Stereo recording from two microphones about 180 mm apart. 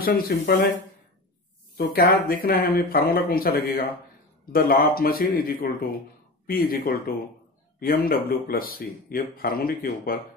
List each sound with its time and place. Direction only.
0.0 s speech: 55° left (ahead or behind)
1.8 s speech: 60° left (ahead or behind)